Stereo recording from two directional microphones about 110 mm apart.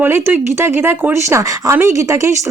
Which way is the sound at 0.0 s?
20° right (ahead or behind).